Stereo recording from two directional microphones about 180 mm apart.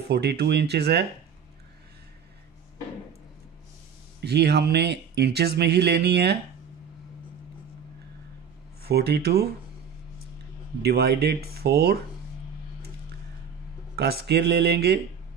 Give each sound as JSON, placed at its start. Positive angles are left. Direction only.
{"t": 0.1, "sound": "speech", "side_deg": -65}
{"t": 4.2, "sound": "speech", "side_deg": -65}
{"t": 8.8, "sound": "speech", "side_deg": -65}
{"t": 10.8, "sound": "speech", "side_deg": -65}
{"t": 13.9, "sound": "speech", "side_deg": -65}